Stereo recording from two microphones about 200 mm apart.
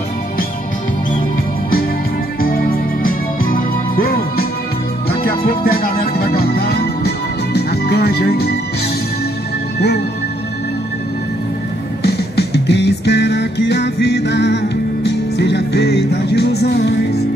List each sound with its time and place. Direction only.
2.4 s music: 45° left (ahead or behind)
5.5 s music: 45° left (ahead or behind)
9.8 s music: 55° left (ahead or behind)
12.0 s music: 55° left (ahead or behind)